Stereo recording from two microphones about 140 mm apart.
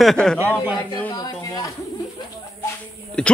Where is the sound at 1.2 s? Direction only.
25° left (ahead or behind).